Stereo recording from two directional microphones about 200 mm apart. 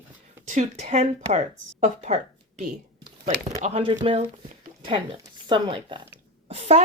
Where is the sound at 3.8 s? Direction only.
25° right (ahead or behind).